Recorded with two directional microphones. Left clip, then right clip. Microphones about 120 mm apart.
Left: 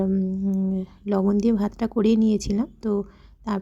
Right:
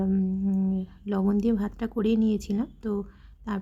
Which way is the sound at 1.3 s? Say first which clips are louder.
Left 4 dB; 35° left (ahead or behind).